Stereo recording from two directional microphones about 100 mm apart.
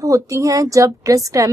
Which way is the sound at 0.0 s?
35° right (ahead or behind).